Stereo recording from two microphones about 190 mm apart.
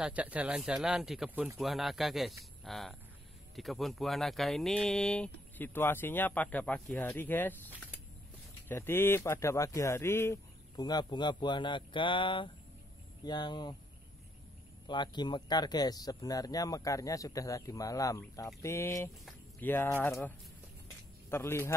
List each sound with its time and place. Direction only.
0.0 s speech: 5° right (ahead or behind); by 13.7 s 20° left (ahead or behind)
14.9 s speech: 25° left (ahead or behind)
21.3 s speech: 10° left (ahead or behind)